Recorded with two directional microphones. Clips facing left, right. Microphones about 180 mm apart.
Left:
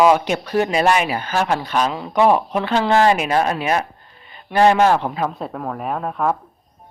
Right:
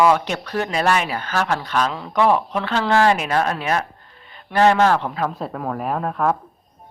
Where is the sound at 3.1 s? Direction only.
5° left (ahead or behind).